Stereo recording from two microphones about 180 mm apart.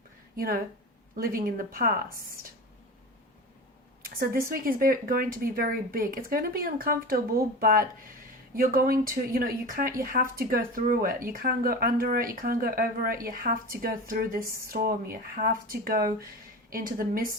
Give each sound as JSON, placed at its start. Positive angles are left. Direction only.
{"t": 0.3, "sound": "speech", "side_deg": -55}
{"t": 4.2, "sound": "speech", "side_deg": -55}